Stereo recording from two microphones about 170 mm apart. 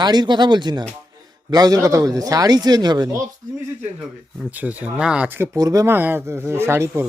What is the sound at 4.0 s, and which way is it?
Speech, 5° right (ahead or behind).